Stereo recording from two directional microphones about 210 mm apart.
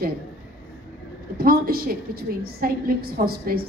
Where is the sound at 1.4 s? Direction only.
45° right (ahead or behind).